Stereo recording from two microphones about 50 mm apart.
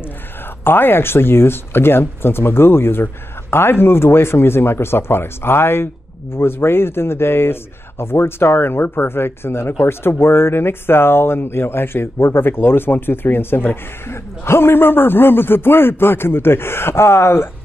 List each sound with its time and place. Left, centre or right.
0.7 s speech: left